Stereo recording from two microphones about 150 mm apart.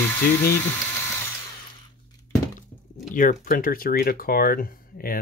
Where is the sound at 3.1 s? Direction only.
65° left (ahead or behind).